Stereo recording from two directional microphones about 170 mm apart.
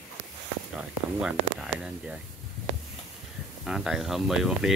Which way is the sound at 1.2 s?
5° right (ahead or behind).